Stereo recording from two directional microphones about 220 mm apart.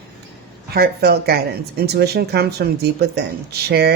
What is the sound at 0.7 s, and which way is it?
Speech, 45° right (ahead or behind).